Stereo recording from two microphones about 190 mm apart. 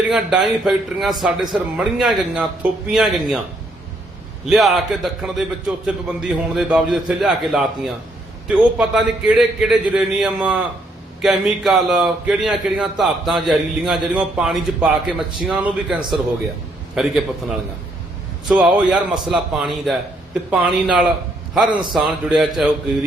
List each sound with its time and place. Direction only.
0.1 s a man's voice: centre (ahead or behind)
4.4 s a man's voice: centre (ahead or behind)
18.4 s a man's voice: 5° right (ahead or behind)